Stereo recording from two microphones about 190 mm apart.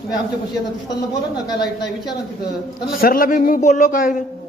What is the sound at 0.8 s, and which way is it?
A man's voice, 20° left (ahead or behind).